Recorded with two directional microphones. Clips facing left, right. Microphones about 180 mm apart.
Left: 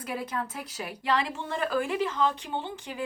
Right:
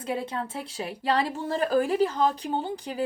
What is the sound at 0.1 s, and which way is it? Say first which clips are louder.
A woman's voice: right 3 dB; 25° right (ahead or behind).